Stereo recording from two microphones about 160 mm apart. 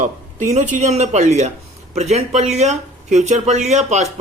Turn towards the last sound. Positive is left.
turn(degrees=-45)  # may be behind; listen again after turning